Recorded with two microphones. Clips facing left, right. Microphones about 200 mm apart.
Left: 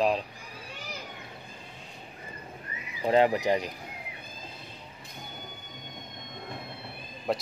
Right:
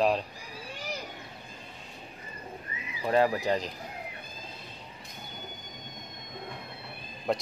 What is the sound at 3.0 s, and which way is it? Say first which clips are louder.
Speech: left 2 dB; 20° left (ahead or behind).